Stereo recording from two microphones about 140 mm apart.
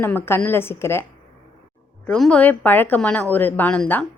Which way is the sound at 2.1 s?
5° left (ahead or behind).